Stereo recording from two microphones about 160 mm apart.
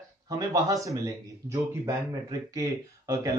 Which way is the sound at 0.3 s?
25° right (ahead or behind).